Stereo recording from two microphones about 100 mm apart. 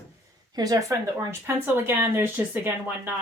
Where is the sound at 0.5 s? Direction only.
40° right (ahead or behind).